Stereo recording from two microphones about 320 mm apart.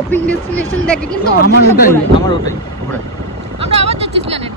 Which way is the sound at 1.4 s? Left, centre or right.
Left.